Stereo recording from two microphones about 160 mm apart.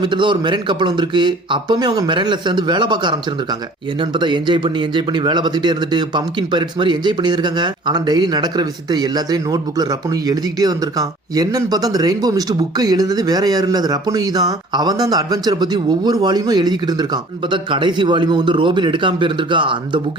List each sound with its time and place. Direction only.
0.0 s speech: 30° right (ahead or behind)